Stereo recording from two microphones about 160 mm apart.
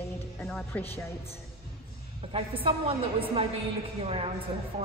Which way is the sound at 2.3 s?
35° right (ahead or behind).